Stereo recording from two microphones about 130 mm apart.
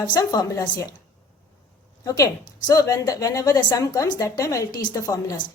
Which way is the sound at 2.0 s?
25° left (ahead or behind).